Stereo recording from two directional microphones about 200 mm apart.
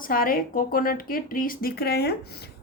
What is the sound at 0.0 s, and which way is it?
Speech, 45° left (ahead or behind).